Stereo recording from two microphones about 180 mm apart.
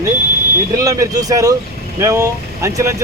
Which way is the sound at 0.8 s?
20° right (ahead or behind).